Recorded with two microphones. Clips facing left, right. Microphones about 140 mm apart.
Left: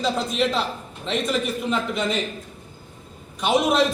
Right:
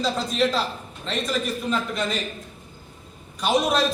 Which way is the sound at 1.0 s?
20° left (ahead or behind).